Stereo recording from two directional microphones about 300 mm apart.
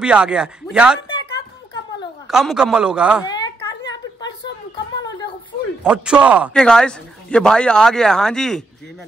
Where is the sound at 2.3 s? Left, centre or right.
Centre.